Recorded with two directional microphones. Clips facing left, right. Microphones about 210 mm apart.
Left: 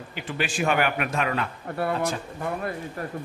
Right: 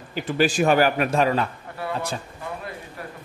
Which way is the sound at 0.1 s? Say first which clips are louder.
Right 9 dB; 40° right (ahead or behind).